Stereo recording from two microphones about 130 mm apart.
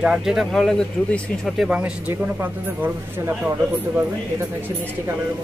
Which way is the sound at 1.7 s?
10° right (ahead or behind).